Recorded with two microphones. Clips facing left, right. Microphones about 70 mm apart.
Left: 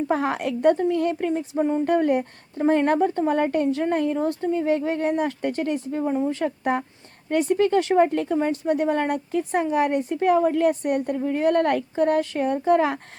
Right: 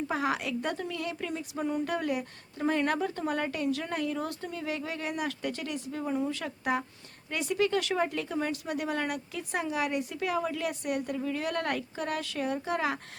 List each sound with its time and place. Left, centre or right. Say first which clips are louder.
0.1 s a woman's voice: left 5 dB; left